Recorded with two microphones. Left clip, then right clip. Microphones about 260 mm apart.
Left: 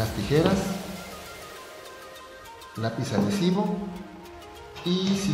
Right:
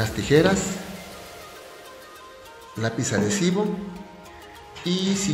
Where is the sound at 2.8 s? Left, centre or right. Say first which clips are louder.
Right 3 dB; right.